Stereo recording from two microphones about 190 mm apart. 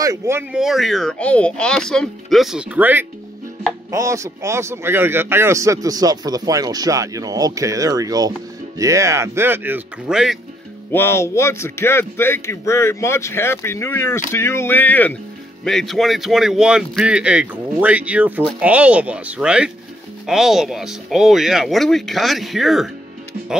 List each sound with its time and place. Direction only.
0.0 s a man's voice: 15° right (ahead or behind)
10.9 s a man's voice: 10° left (ahead or behind)